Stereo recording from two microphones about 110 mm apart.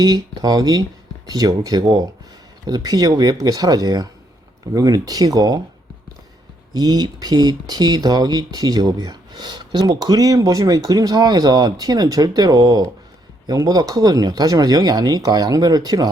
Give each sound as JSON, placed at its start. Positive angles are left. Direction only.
{"t": 0.0, "sound": "speech", "side_deg": -35}
{"t": 6.7, "sound": "speech", "side_deg": -35}